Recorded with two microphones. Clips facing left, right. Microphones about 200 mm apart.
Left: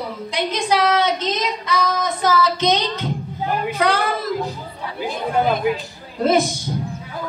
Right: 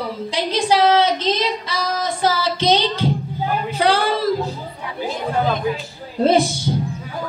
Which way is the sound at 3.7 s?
30° right (ahead or behind).